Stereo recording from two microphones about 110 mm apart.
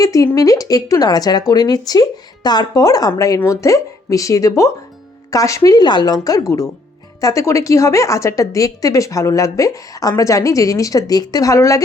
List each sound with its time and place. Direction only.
0.0 s a woman's voice: 30° left (ahead or behind)